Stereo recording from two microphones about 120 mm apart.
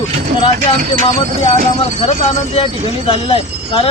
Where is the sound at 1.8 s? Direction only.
50° left (ahead or behind).